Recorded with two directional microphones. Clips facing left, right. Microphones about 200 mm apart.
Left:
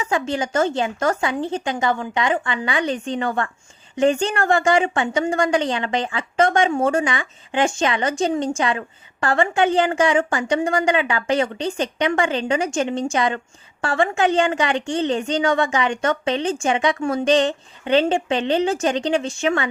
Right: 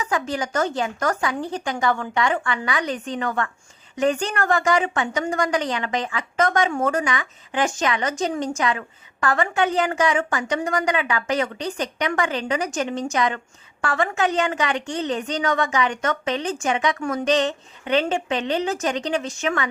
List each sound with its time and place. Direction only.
0.0 s a woman's voice: 25° left (ahead or behind)